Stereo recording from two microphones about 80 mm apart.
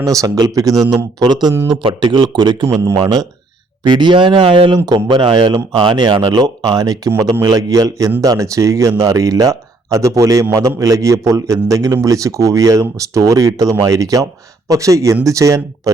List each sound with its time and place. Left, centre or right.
0.0 s speech: right
1.6 s speech: right
3.0 s speech: right
3.8 s speech: right